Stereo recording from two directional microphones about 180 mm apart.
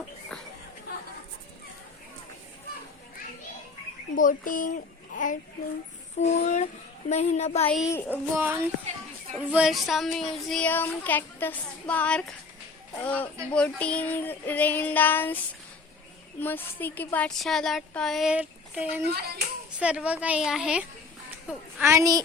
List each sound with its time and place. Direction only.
0.3 s chatter: 5° left (ahead or behind)
4.1 s a child's voice: 50° left (ahead or behind)
7.9 s child singing: 10° left (ahead or behind)
8.1 s a woman's voice: 15° right (ahead or behind)
9.4 s child singing: 5° right (ahead or behind); by 15.4 s 10° left (ahead or behind)
16.4 s child singing: 10° left (ahead or behind); by 19.0 s 10° right (ahead or behind)
19.0 s a child's voice: 60° right (ahead or behind)
19.8 s a woman's voice: 5° right (ahead or behind)